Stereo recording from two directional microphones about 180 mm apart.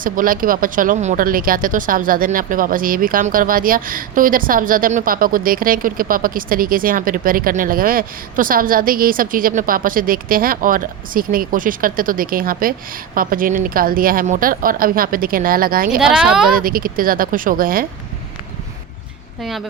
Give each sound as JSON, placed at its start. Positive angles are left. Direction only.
{"t": 0.0, "sound": "speech", "side_deg": -50}
{"t": 16.0, "sound": "speech", "side_deg": -5}
{"t": 16.5, "sound": "speech", "side_deg": -50}
{"t": 19.4, "sound": "speech", "side_deg": 0}